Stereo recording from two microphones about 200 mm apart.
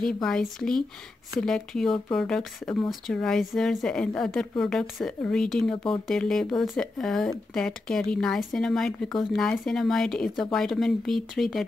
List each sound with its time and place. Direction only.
0.0 s speech: centre (ahead or behind)